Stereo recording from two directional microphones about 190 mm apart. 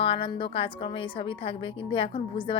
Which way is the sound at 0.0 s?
30° left (ahead or behind).